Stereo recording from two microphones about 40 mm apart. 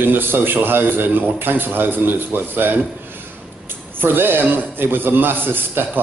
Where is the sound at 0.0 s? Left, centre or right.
Right.